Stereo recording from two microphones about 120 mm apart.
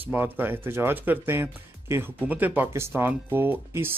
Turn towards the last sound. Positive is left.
turn(degrees=-20)  # may be behind; listen again after turning